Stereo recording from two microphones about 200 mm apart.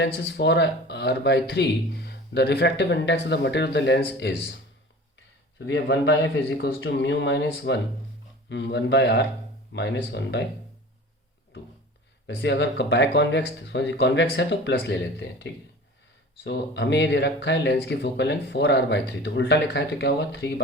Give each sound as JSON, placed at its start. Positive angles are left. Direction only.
{"t": 0.0, "sound": "speech", "side_deg": 60}
{"t": 5.5, "sound": "speech", "side_deg": 60}
{"t": 12.4, "sound": "speech", "side_deg": 60}